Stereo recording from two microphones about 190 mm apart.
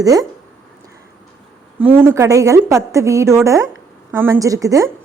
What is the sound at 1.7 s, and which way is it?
A woman's voice, 10° right (ahead or behind).